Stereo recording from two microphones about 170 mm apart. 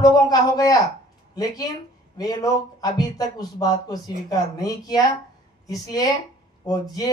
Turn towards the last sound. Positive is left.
turn(degrees=20)  # may be behind; listen again after turning